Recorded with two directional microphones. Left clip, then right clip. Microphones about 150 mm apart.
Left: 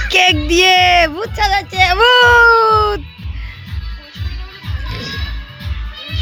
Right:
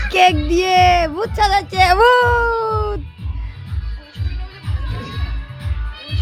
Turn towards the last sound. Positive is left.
turn(degrees=-5)  # may be behind; listen again after turning